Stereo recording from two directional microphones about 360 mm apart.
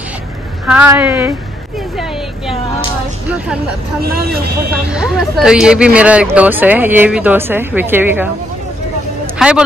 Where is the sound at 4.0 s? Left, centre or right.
Right.